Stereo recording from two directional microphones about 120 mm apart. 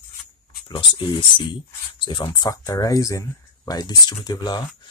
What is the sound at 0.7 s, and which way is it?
Speech, 45° left (ahead or behind).